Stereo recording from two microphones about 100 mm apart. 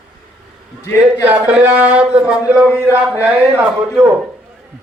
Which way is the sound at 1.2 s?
15° right (ahead or behind).